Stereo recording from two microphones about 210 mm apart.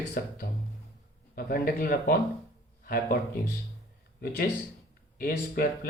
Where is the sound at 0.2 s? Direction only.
45° left (ahead or behind).